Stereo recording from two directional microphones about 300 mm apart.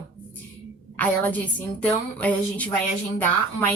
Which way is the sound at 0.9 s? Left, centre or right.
Centre.